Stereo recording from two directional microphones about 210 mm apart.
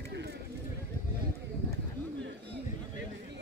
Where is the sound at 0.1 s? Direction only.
50° right (ahead or behind).